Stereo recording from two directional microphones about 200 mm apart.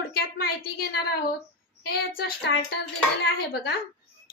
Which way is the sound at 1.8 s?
50° left (ahead or behind).